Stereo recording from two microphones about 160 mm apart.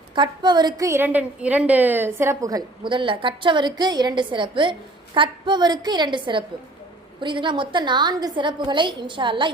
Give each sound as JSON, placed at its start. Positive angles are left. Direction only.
{"t": 0.1, "sound": "a woman's voice", "side_deg": -30}